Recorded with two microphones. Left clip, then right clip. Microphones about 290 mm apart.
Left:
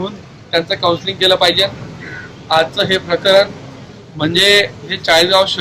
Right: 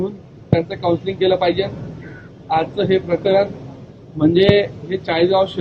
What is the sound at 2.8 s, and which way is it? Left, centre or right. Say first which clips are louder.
A man's voice: left 3 dB; centre.